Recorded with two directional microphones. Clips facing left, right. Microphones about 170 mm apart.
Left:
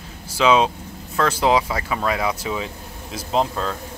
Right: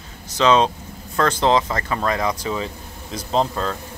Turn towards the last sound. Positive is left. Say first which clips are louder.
# right 1 dB
turn(degrees=0)  # may be behind; listen again after turning